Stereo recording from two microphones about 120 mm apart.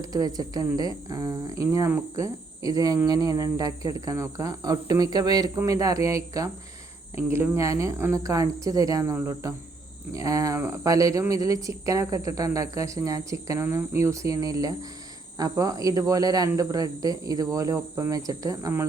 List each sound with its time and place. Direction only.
0.0 s speech: 30° right (ahead or behind)